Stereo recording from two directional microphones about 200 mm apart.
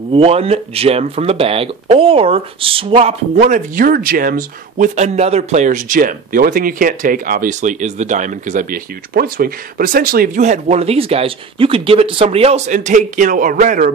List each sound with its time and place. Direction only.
0.1 s a man's voice: 30° right (ahead or behind)